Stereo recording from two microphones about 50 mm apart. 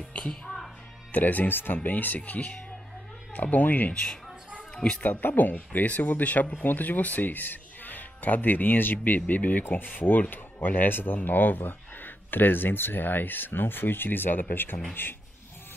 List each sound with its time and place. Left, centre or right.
0.3 s music: centre
1.1 s speech: left
3.9 s a man's voice: left
5.0 s speech: left